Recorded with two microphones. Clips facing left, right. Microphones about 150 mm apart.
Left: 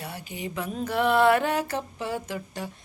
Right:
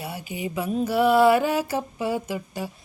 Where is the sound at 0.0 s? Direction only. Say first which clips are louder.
Right 4 dB; 10° right (ahead or behind).